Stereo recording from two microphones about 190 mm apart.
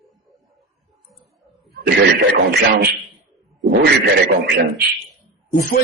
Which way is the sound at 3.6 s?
55° right (ahead or behind).